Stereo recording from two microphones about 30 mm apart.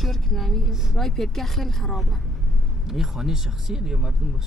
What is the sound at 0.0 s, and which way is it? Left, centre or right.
Speech, centre.